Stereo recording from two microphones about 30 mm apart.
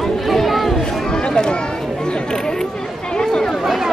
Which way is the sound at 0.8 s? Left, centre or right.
Left.